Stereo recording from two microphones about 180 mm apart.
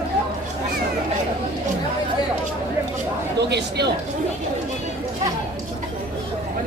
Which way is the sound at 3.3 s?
70° right (ahead or behind).